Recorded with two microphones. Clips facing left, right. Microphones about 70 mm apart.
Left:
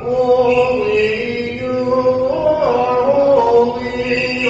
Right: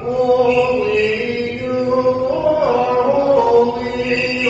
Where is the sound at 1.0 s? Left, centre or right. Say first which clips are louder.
Even; right.